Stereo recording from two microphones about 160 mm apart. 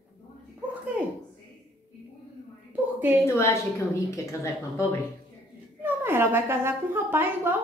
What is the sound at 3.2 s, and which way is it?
A woman's voice, 15° left (ahead or behind).